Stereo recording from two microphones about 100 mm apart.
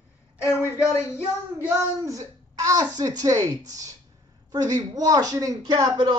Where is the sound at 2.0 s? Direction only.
35° right (ahead or behind).